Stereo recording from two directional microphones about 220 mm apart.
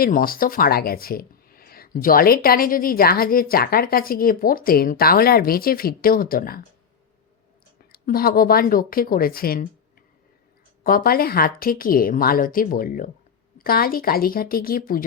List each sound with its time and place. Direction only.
0.0 s speech: 40° left (ahead or behind)
7.9 s speech: 40° left (ahead or behind)
10.8 s speech: 40° left (ahead or behind)